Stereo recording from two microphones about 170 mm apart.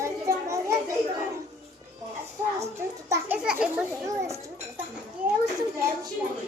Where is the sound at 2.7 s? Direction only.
15° right (ahead or behind).